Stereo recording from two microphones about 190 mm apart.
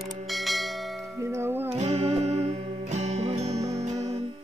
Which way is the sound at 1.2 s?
15° right (ahead or behind).